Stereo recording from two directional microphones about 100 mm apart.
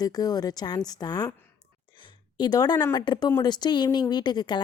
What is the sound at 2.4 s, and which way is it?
Speech, 40° left (ahead or behind).